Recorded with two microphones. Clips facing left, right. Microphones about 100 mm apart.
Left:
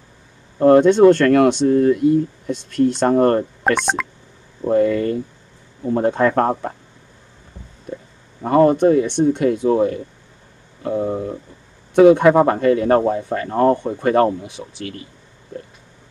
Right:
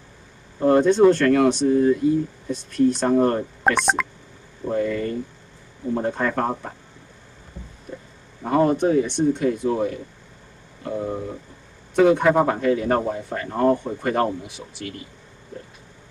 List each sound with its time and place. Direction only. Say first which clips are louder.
0.6 s speech: left 5 dB; 60° left (ahead or behind)
3.6 s speech: right 3 dB; 5° right (ahead or behind)
4.6 s speech: left 7 dB; 60° left (ahead or behind)
8.5 s speech: left 5 dB; 50° left (ahead or behind)